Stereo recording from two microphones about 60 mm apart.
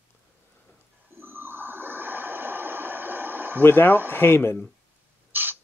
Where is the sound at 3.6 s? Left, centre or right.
Left.